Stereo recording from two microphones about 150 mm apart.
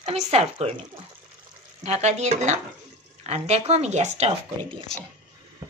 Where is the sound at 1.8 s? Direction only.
50° right (ahead or behind).